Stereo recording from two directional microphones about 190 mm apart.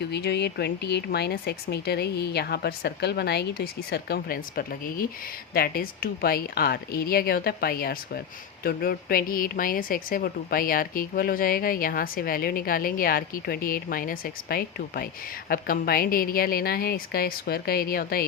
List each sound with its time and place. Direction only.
0.0 s a woman's voice: 60° left (ahead or behind)